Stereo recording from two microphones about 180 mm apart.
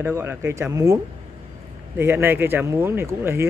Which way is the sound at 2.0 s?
15° right (ahead or behind).